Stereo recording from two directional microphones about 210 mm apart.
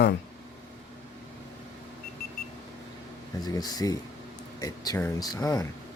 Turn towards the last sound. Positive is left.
turn(degrees=15)  # may be behind; listen again after turning